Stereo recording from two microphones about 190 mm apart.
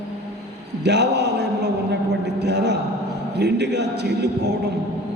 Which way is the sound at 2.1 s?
60° right (ahead or behind).